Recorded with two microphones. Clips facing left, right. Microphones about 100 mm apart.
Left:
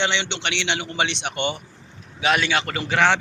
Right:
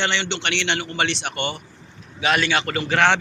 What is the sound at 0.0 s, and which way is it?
A man's voice, 15° left (ahead or behind).